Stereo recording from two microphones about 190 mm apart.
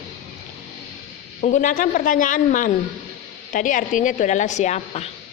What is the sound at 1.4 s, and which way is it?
A man's voice, 40° left (ahead or behind).